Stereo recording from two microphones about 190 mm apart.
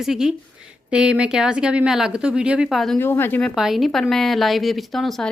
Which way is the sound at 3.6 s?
Centre (ahead or behind).